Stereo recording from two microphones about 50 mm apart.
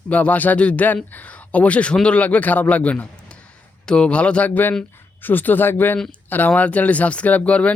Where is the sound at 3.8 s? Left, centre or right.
Centre; by 6.0 s left.